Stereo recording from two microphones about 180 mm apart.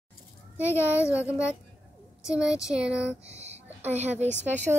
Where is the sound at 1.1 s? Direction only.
5° right (ahead or behind).